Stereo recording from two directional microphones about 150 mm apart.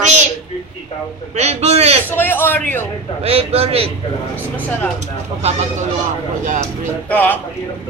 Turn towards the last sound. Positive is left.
turn(degrees=10)  # may be behind; listen again after turning